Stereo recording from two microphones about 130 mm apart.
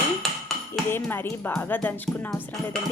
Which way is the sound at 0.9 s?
15° left (ahead or behind).